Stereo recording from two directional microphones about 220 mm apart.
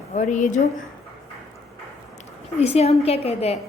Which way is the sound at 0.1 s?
35° left (ahead or behind).